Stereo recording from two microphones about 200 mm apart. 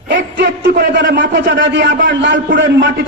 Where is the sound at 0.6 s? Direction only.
55° right (ahead or behind).